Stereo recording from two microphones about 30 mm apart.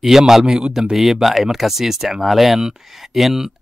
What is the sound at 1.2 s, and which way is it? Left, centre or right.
Speech, centre.